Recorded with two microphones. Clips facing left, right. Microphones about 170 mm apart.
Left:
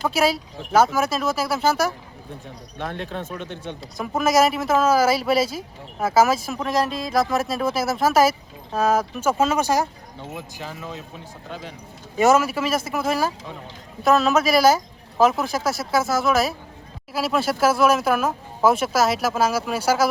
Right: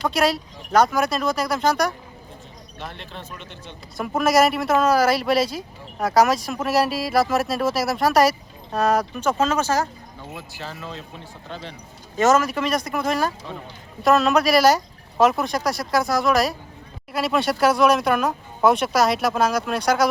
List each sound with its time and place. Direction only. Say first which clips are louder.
0.0 s speech: even; 5° left (ahead or behind)
2.7 s speech: left 7 dB; 55° left (ahead or behind)
3.9 s speech: right 1 dB; centre (ahead or behind)